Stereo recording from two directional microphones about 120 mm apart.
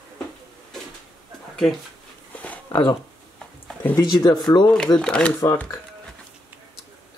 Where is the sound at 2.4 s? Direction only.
15° left (ahead or behind).